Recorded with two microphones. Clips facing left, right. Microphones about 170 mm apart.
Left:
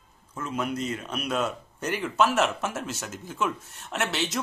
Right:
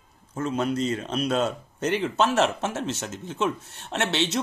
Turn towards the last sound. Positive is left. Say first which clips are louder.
# right 3 dB
turn(degrees=-30)  # may be behind; listen again after turning